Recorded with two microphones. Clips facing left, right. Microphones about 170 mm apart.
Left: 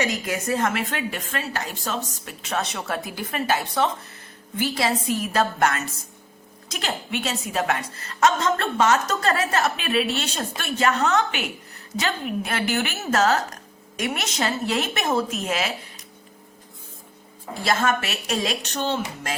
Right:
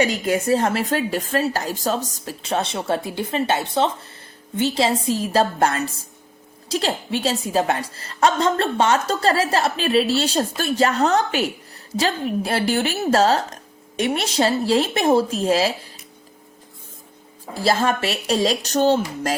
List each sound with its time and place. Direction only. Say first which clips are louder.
0.0 s a woman's voice: right 6 dB; 30° right (ahead or behind)
17.5 s a woman's voice: right 3 dB; 35° right (ahead or behind)